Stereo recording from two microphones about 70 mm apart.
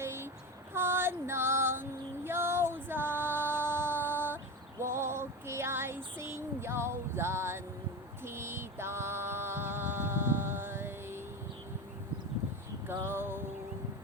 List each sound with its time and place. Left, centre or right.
0.0 s child singing: right
0.7 s female singing: right
4.1 s a sound: right
4.8 s female singing: right
8.2 s music: right
12.9 s music: right